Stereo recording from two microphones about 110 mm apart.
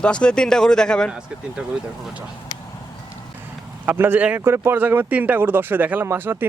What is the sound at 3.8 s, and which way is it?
Speech, 20° right (ahead or behind).